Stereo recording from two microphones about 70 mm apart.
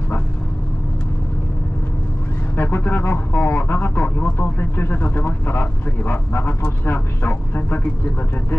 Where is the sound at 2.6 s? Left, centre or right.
Left.